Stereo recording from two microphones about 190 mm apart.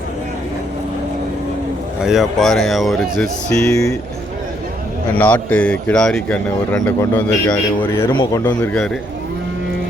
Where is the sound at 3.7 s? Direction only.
15° left (ahead or behind).